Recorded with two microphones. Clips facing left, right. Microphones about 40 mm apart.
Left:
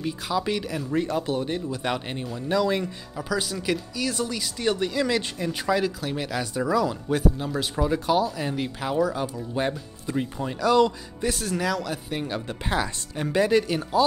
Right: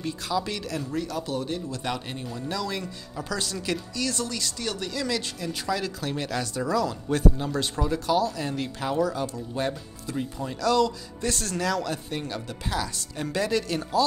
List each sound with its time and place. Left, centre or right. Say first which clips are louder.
0.0 s speech: left 2 dB; centre
0.9 s speech: left 6 dB; left
3.2 s speech: left 3 dB; centre
12.6 s speech: left 3 dB; left